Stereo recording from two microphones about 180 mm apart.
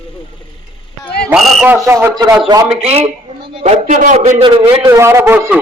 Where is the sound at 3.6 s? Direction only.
40° right (ahead or behind).